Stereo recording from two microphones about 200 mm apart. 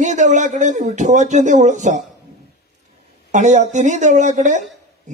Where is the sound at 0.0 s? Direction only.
35° right (ahead or behind).